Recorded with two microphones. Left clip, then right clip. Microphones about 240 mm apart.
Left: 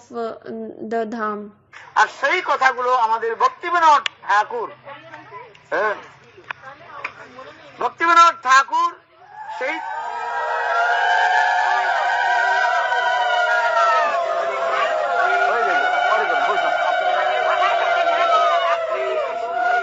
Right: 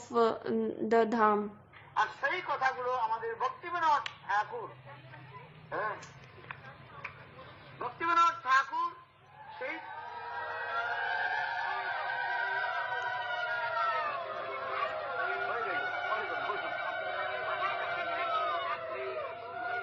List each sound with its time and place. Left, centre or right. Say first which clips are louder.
0.1 s a woman's voice: left 1 dB; centre
1.9 s a man's voice: left 14 dB; left
7.8 s a man's voice: left 15 dB; left
9.6 s a sound: left 15 dB; left